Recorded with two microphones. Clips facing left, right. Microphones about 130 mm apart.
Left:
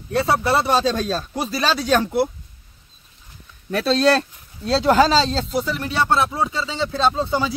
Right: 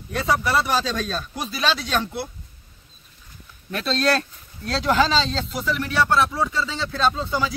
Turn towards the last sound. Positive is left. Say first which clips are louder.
# left 3 dB
turn(degrees=25)  # may be behind; listen again after turning